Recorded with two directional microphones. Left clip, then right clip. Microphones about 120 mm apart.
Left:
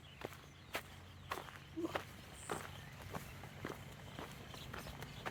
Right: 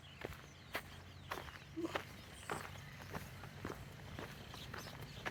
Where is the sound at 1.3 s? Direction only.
30° left (ahead or behind).